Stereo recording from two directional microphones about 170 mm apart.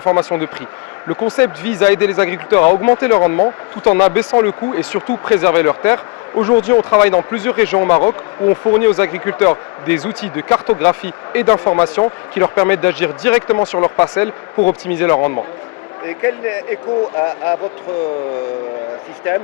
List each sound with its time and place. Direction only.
0.0 s speech: 15° left (ahead or behind)